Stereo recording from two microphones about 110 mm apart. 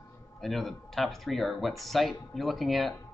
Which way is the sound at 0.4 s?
Centre (ahead or behind).